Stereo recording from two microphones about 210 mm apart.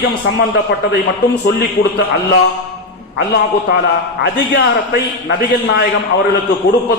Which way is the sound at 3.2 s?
55° left (ahead or behind).